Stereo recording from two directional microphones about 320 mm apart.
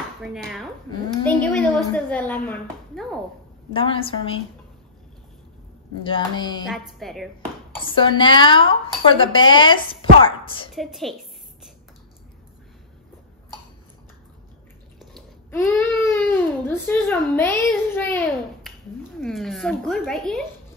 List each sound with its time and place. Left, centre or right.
0.2 s a woman's voice: centre
3.7 s speech: centre
6.0 s speech: centre
6.7 s speech: centre
7.8 s speech: centre
10.7 s speech: centre
15.0 s speech: centre